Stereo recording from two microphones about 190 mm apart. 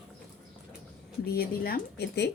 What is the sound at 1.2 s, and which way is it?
Speech, 55° left (ahead or behind).